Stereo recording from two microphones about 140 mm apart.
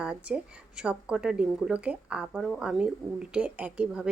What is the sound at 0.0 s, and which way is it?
Speech, 5° right (ahead or behind).